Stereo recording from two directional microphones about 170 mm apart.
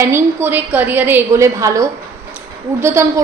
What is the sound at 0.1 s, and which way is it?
A woman's voice, 10° right (ahead or behind).